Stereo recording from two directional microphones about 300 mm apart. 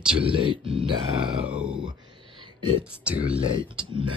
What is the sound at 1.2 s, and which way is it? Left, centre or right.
Speech, centre.